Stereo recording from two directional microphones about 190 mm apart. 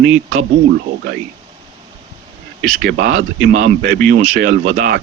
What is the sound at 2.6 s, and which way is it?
A man's voice, 45° right (ahead or behind).